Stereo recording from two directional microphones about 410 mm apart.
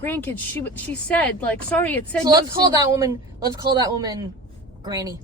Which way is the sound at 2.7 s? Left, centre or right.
Centre.